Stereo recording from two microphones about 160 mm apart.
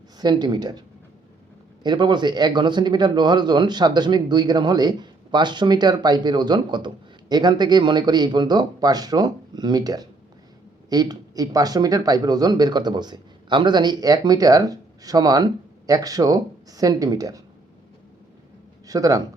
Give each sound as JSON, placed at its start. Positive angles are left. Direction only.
{"t": 0.2, "sound": "speech", "side_deg": -25}
{"t": 1.8, "sound": "speech", "side_deg": -30}
{"t": 18.9, "sound": "speech", "side_deg": -20}